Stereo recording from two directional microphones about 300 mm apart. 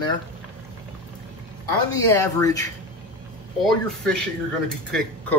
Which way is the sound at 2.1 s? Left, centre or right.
Centre.